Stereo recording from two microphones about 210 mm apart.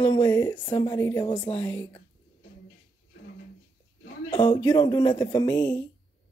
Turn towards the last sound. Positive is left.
turn(degrees=20)  # may be behind; listen again after turning